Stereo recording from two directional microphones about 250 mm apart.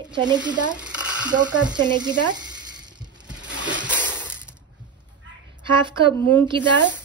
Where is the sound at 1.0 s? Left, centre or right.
Centre.